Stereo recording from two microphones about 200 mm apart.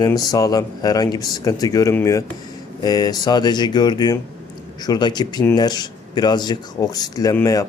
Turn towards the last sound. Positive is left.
turn(degrees=15)  # may be behind; listen again after turning